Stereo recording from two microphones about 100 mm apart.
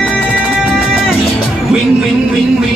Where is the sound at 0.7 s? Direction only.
5° right (ahead or behind).